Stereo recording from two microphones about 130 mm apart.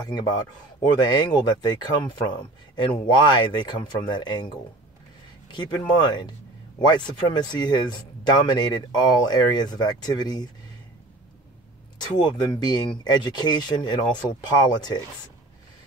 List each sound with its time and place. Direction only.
0.0 s speech: 30° left (ahead or behind)
5.5 s speech: 35° left (ahead or behind)
12.0 s speech: 35° left (ahead or behind)